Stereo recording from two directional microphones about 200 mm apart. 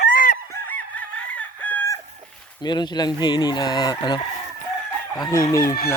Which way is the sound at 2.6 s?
20° left (ahead or behind).